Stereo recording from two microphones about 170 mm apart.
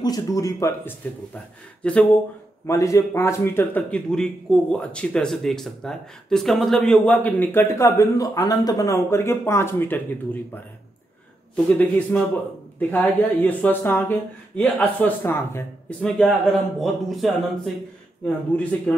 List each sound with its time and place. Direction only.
0.0 s speech: 20° left (ahead or behind)
1.8 s speech: 5° left (ahead or behind)
2.6 s a man's voice: 15° left (ahead or behind)
16.2 s a man's voice: centre (ahead or behind)